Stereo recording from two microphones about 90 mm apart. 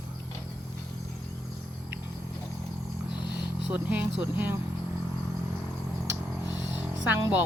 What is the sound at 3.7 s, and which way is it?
Speech, 20° right (ahead or behind).